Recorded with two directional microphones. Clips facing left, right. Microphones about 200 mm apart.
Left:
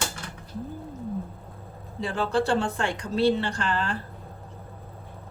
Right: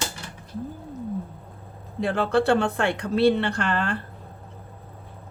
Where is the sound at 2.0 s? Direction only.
60° right (ahead or behind).